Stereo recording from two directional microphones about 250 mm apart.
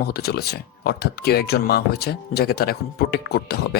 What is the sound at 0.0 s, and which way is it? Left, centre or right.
Speech, left.